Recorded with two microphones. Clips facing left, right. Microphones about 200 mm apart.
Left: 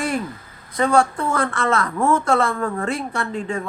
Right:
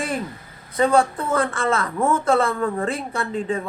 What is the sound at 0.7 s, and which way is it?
A man's voice, 30° right (ahead or behind).